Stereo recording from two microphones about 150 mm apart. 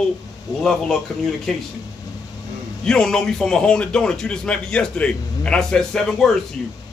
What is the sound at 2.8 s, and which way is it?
Speech, 5° left (ahead or behind).